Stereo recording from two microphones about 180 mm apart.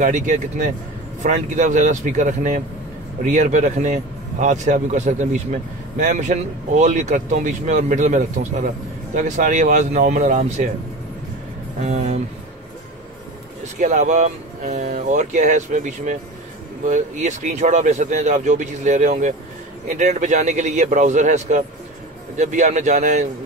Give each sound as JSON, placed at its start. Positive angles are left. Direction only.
{"t": 0.0, "sound": "speech", "side_deg": -45}
{"t": 11.8, "sound": "speech", "side_deg": -40}
{"t": 13.7, "sound": "speech", "side_deg": -45}